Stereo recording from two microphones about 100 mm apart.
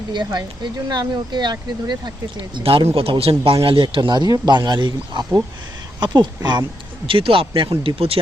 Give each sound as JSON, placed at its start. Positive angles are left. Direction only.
{"t": 0.3, "sound": "speech", "side_deg": -45}
{"t": 2.6, "sound": "a man's voice", "side_deg": -65}
{"t": 7.1, "sound": "a man's voice", "side_deg": -60}